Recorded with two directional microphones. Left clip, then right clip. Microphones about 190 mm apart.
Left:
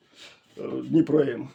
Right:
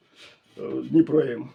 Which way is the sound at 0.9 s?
25° left (ahead or behind).